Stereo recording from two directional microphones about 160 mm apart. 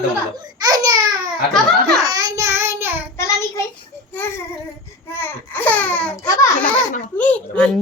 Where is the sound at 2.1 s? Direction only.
20° right (ahead or behind).